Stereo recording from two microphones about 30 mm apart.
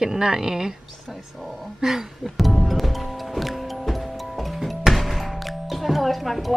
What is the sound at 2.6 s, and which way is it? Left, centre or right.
Music, centre.